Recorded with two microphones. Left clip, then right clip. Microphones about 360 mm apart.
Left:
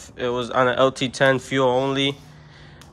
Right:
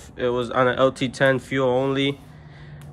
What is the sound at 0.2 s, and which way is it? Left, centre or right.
Speech, centre.